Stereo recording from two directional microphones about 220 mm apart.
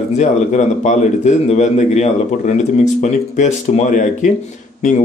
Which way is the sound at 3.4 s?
35° left (ahead or behind).